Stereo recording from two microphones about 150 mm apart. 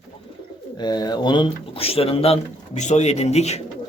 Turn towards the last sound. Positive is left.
turn(degrees=45)  # may be behind; listen again after turning